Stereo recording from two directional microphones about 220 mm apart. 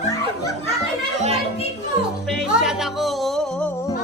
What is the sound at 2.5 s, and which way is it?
Music, 5° right (ahead or behind).